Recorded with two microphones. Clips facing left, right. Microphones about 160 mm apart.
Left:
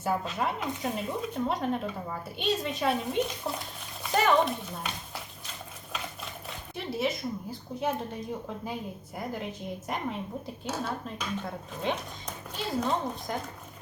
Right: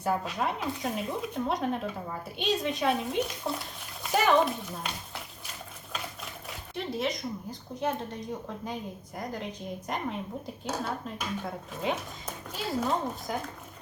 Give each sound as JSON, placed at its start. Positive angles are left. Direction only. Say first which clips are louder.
{"t": 0.0, "sound": "speech", "louder": "even", "side_deg": 5}
{"t": 6.7, "sound": "a woman's voice", "louder": "left 1 dB", "side_deg": 5}